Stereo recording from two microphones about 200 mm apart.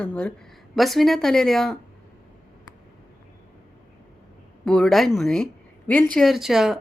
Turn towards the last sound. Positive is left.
turn(degrees=0)  # may be behind; listen again after turning